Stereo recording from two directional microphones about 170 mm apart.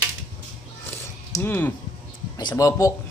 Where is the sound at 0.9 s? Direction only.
10° left (ahead or behind).